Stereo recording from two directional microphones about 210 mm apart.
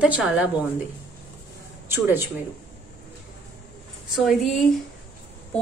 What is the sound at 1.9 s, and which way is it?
Speech, 10° right (ahead or behind).